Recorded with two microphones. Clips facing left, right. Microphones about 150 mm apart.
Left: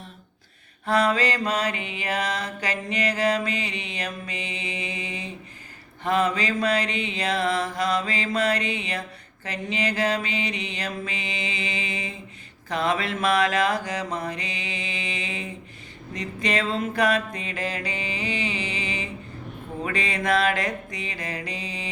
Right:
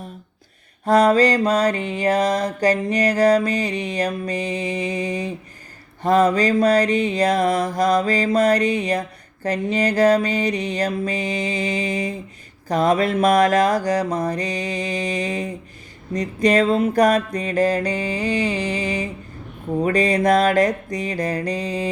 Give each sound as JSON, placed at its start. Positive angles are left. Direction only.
{"t": 0.9, "sound": "mantra", "side_deg": -40}